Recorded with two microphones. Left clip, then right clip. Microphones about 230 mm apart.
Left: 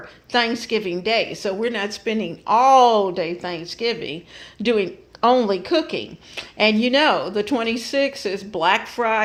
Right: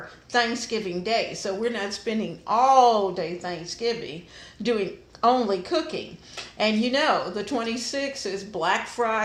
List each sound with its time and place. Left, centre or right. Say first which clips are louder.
0.3 s speech: left 4 dB; left